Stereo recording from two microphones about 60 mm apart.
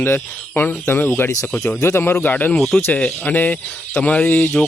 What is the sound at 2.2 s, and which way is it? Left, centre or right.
Speech, left.